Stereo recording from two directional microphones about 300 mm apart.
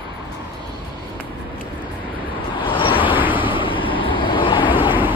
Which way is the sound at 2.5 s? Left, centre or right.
Centre.